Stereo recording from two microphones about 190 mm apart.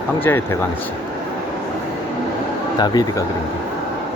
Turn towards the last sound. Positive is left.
turn(degrees=20)  # may be behind; listen again after turning